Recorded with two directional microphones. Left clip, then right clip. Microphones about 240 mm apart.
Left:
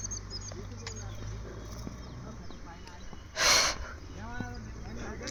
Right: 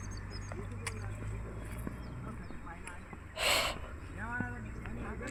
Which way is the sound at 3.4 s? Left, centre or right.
Left.